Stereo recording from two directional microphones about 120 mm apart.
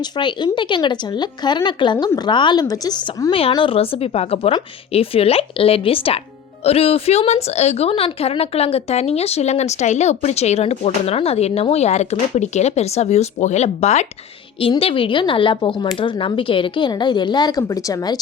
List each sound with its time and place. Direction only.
0.0 s speech: 40° left (ahead or behind)
3.5 s a woman's voice: 45° left (ahead or behind); by 14.1 s 70° left (ahead or behind)
14.8 s a woman's voice: 50° left (ahead or behind); by 18.2 s 30° left (ahead or behind)